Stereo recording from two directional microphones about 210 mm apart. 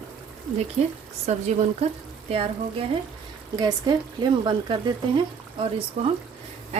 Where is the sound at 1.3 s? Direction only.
35° right (ahead or behind).